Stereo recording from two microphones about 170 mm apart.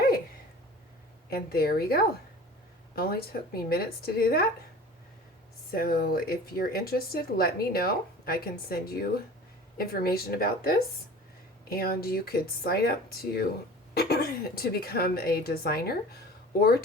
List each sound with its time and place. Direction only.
1.3 s speech: 60° left (ahead or behind)
5.7 s speech: 60° left (ahead or behind)